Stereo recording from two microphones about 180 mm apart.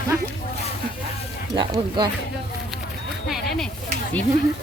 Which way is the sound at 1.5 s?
25° right (ahead or behind).